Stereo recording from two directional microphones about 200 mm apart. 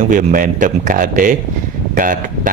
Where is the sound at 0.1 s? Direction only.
40° right (ahead or behind).